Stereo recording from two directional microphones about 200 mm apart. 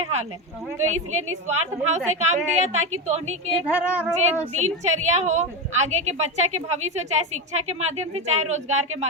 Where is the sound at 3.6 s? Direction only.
5° right (ahead or behind).